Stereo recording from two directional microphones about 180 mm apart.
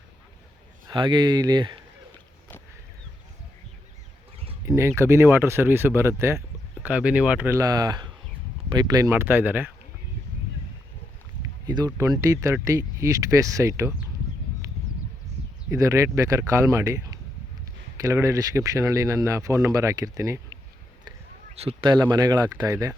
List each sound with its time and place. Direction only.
0.9 s speech: 25° right (ahead or behind)
4.6 s speech: 15° right (ahead or behind)
11.6 s speech: 20° right (ahead or behind)
14.6 s a sound: 15° right (ahead or behind)
15.7 s speech: 15° right (ahead or behind)
21.5 s speech: 35° right (ahead or behind)